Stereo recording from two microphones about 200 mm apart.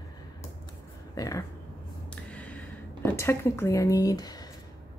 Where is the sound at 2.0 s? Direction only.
5° left (ahead or behind).